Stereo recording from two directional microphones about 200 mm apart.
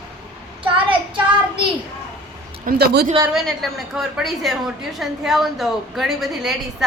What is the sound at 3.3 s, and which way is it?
A woman's voice, centre (ahead or behind).